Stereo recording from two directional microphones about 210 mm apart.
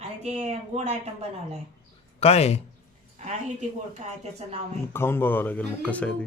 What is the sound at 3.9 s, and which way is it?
Speech, 30° right (ahead or behind).